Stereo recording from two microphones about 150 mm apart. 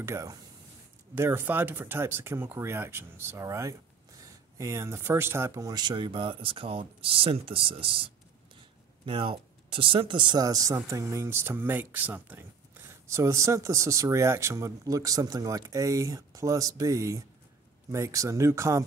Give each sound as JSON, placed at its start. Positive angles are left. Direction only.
{"t": 0.0, "sound": "speech", "side_deg": -20}